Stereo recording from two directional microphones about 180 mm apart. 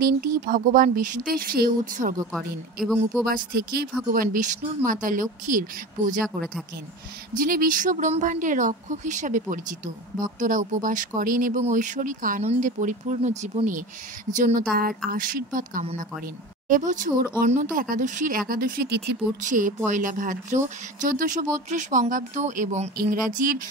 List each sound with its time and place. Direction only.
0.0 s speech: 50° right (ahead or behind)
2.3 s a man's voice: centre (ahead or behind)
4.1 s speech: 50° right (ahead or behind)
6.2 s a man's voice: centre (ahead or behind)
7.3 s speech: 50° right (ahead or behind)